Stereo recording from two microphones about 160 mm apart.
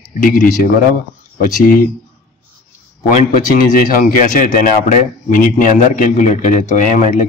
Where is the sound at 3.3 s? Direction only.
65° left (ahead or behind).